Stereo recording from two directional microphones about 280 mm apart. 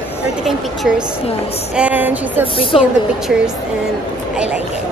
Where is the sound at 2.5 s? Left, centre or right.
Centre.